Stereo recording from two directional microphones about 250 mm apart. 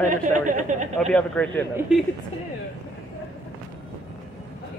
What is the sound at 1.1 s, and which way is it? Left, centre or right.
Speech, centre.